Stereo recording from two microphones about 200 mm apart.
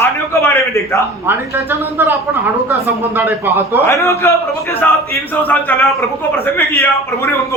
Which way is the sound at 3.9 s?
15° left (ahead or behind).